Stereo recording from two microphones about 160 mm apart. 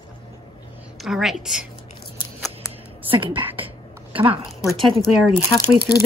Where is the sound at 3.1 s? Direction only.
30° right (ahead or behind).